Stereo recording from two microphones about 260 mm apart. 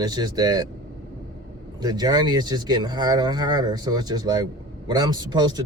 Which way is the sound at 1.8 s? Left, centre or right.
Centre.